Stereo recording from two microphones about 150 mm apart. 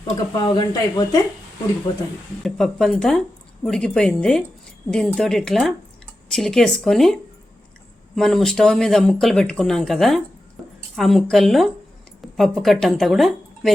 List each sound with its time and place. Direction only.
0.3 s speech: 30° left (ahead or behind)
2.4 s a woman's voice: 5° left (ahead or behind)